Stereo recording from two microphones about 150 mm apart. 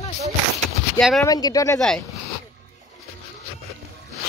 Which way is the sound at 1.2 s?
25° left (ahead or behind).